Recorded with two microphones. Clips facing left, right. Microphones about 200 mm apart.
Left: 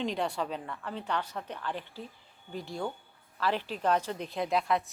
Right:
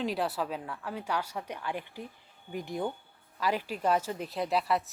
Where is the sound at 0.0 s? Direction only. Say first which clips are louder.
Even; 5° right (ahead or behind).